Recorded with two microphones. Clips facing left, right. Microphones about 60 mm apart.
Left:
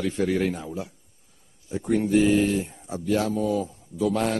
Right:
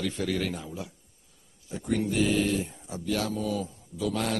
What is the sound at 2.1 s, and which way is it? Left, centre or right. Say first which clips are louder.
Speech: left 7 dB; left.